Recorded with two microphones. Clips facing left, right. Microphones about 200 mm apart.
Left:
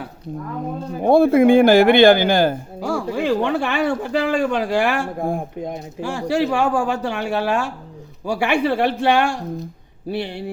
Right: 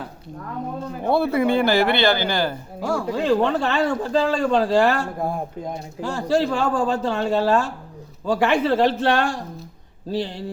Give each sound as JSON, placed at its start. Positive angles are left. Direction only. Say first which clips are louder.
{"t": 1.0, "sound": "speech", "louder": "left 7 dB", "side_deg": 45}
{"t": 2.9, "sound": "speech", "louder": "even", "side_deg": 15}